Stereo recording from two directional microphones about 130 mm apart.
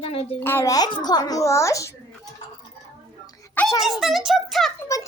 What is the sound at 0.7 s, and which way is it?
Speech, 30° left (ahead or behind).